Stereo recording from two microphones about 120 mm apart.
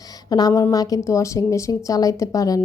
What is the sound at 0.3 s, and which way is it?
A woman's voice, 35° left (ahead or behind).